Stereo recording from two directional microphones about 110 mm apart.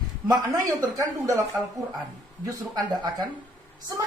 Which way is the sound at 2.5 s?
35° right (ahead or behind).